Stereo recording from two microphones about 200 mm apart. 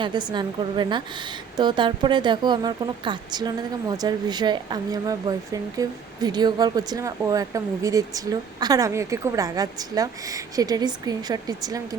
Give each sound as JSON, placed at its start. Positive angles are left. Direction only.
{"t": 0.0, "sound": "speech", "side_deg": -20}